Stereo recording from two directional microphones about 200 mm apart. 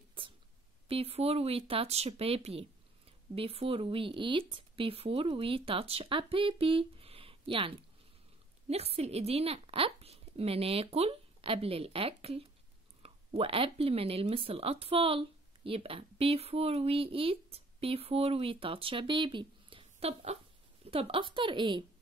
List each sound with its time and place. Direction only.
0.8 s speech: 30° right (ahead or behind)